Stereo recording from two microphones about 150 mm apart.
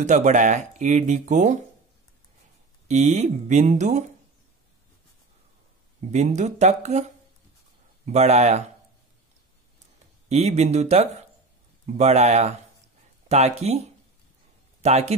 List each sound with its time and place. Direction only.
0.0 s speech: 55° right (ahead or behind)
2.9 s speech: 50° right (ahead or behind)
6.1 s speech: 50° right (ahead or behind)
10.2 s a man's voice: 45° right (ahead or behind)